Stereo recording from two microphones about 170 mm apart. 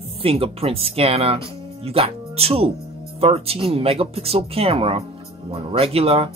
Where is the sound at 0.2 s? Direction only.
35° right (ahead or behind).